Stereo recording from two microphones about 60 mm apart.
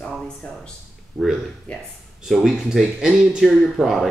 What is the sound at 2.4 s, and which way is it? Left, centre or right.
Speech, centre.